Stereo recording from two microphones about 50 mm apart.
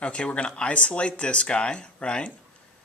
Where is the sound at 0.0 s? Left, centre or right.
Left.